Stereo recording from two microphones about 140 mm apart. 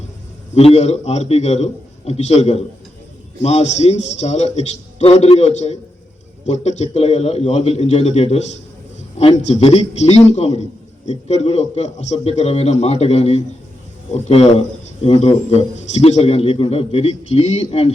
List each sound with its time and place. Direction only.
0.5 s a man's voice: 50° left (ahead or behind)